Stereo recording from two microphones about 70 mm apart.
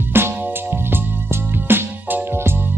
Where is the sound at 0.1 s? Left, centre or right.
Right.